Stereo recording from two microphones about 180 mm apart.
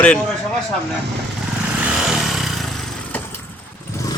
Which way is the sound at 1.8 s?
5° right (ahead or behind).